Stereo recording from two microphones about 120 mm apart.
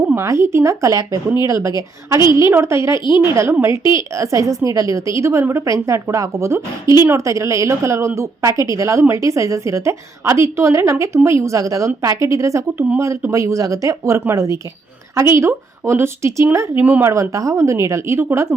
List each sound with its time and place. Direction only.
0.1 s a woman's voice: 25° right (ahead or behind)